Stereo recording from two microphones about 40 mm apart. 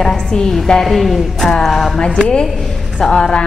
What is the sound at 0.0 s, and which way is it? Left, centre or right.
Speech, centre.